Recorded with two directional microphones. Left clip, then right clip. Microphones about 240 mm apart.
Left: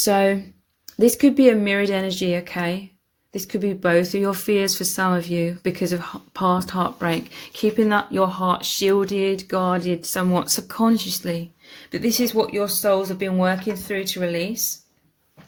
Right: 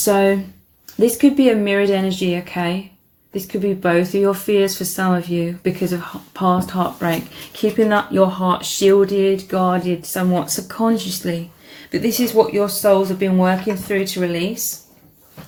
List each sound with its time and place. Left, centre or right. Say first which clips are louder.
0.0 s speech: right 3 dB; left